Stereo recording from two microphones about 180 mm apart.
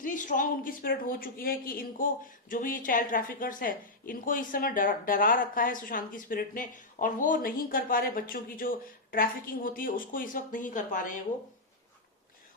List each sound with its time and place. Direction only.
0.0 s a woman's voice: 45° left (ahead or behind)